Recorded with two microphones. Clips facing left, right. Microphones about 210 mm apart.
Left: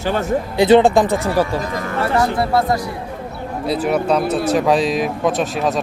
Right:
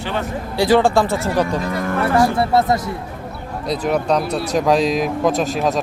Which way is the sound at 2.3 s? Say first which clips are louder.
Right 1 dB; 25° right (ahead or behind).